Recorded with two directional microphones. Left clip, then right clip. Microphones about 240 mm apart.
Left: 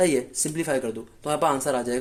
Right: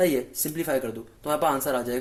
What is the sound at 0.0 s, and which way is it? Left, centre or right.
Speech, centre.